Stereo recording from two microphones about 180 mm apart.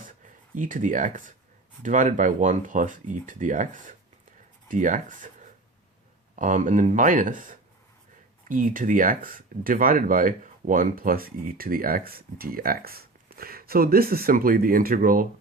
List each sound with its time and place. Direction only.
0.5 s speech: 45° right (ahead or behind)